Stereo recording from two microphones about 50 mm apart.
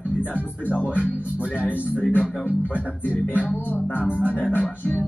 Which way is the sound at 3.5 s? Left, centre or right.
Left.